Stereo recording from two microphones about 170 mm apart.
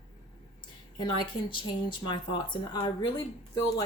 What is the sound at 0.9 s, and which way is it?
Speech, 25° left (ahead or behind).